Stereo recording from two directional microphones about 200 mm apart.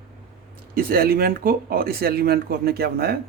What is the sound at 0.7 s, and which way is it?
Speech, 50° right (ahead or behind).